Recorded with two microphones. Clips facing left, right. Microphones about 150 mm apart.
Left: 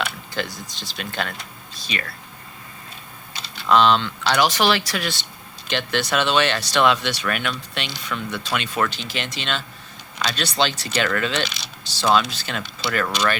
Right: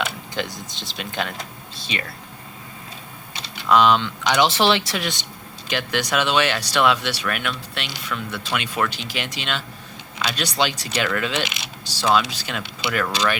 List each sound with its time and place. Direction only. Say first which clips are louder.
0.0 s speech: right 1 dB; 20° right (ahead or behind)
3.7 s speech: even; 10° right (ahead or behind)
4.4 s speech: right 1 dB; 25° right (ahead or behind); by 13.1 s 10° right (ahead or behind)